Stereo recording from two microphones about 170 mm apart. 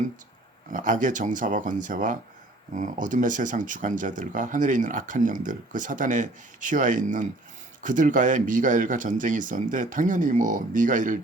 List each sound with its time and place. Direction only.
0.7 s speech: 50° right (ahead or behind)